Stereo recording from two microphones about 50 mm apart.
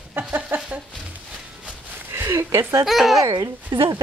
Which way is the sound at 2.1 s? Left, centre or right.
Right.